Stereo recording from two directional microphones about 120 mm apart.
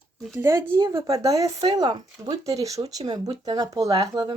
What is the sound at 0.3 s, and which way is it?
Speech, 25° right (ahead or behind).